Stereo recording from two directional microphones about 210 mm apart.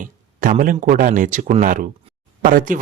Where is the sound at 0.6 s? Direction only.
40° right (ahead or behind).